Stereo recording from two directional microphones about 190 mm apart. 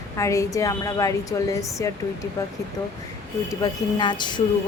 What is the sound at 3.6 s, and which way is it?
Speech, 25° left (ahead or behind).